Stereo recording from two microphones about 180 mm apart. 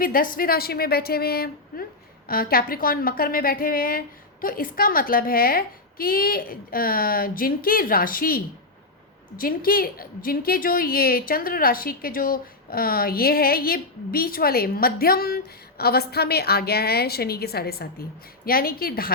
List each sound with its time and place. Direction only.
0.0 s a woman's voice: 50° left (ahead or behind)
9.4 s speech: 55° left (ahead or behind)